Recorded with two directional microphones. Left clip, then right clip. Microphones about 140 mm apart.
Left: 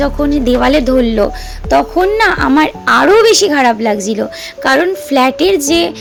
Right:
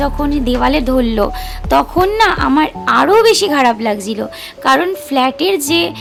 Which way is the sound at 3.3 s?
10° left (ahead or behind).